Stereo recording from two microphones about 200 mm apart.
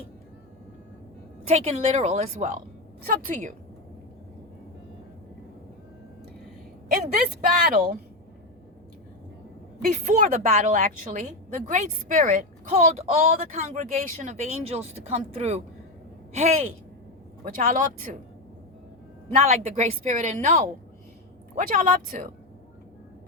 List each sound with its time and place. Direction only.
1.5 s a woman's voice: 30° right (ahead or behind)
7.1 s a woman's voice: 40° right (ahead or behind)
9.8 s a woman's voice: 35° right (ahead or behind)
19.3 s a woman's voice: 35° right (ahead or behind)
21.5 s speech: 45° right (ahead or behind)